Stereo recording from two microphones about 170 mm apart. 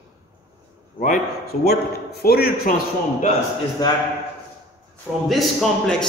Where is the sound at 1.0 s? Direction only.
55° left (ahead or behind).